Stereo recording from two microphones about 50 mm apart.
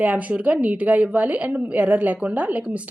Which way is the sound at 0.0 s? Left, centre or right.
Right.